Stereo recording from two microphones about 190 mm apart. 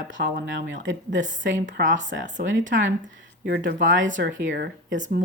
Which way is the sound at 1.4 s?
80° right.